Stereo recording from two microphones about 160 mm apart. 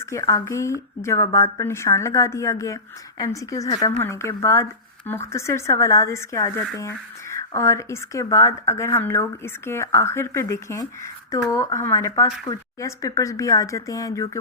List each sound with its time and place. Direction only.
0.0 s speech: 20° left (ahead or behind)